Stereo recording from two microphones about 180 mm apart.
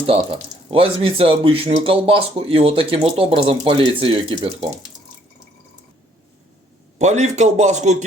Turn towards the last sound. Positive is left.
turn(degrees=-40)  # may be behind; listen again after turning